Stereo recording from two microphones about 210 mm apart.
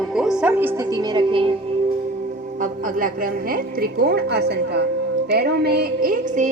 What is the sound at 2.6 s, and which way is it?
A woman's voice, 40° right (ahead or behind).